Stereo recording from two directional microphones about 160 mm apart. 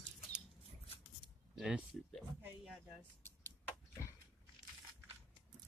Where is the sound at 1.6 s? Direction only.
5° right (ahead or behind).